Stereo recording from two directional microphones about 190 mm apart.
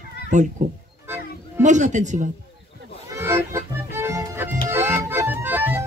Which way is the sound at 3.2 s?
15° right (ahead or behind).